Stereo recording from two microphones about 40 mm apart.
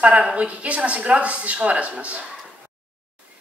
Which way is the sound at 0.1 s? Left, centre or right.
Right.